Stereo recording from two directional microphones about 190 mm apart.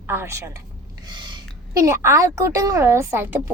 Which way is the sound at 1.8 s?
15° right (ahead or behind).